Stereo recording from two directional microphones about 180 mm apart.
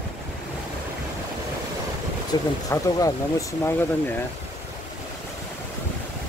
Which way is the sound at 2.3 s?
25° left (ahead or behind).